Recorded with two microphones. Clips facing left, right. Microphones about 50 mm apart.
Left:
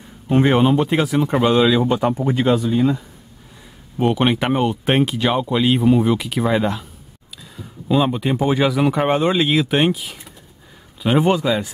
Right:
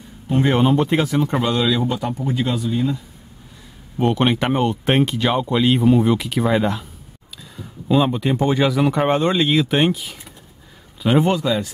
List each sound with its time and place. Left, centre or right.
0.5 s speech: centre
1.5 s speech: centre; by 2.7 s left
2.7 s speech: left
4.0 s speech: centre